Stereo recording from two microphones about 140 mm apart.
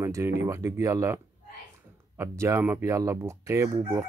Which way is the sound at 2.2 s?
20° right (ahead or behind).